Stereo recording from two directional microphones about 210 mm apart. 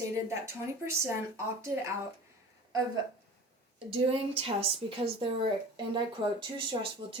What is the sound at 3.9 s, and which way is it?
A woman's voice, 25° right (ahead or behind).